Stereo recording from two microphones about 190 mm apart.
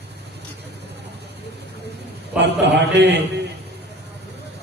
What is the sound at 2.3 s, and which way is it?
Speech, 65° right (ahead or behind).